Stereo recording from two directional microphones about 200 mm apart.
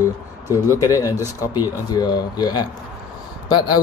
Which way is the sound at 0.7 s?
15° left (ahead or behind).